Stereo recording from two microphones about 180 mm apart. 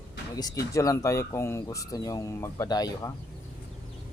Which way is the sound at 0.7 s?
20° left (ahead or behind).